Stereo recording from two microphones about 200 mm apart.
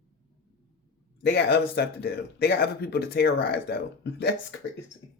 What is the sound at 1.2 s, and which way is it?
Speech, 55° left (ahead or behind).